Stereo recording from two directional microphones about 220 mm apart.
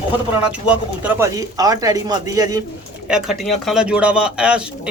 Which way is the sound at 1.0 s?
15° right (ahead or behind).